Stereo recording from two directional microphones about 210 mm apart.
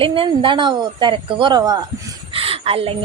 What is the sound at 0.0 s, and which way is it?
A woman's voice, 25° right (ahead or behind).